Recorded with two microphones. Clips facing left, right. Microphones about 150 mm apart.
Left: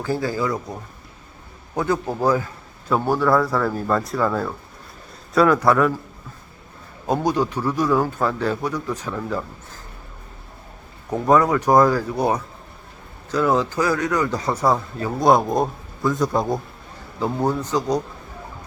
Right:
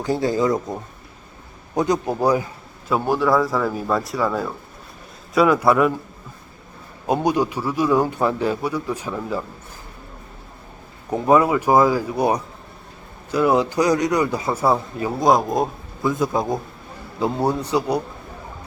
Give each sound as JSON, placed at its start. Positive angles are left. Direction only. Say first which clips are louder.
{"t": 0.0, "sound": "a man's voice", "louder": "right 3 dB", "side_deg": -20}
{"t": 7.1, "sound": "a man's voice", "louder": "right 1 dB", "side_deg": -10}
{"t": 11.1, "sound": "a man's voice", "louder": "right 1 dB", "side_deg": -10}
{"t": 17.2, "sound": "a man's voice", "louder": "right 1 dB", "side_deg": -15}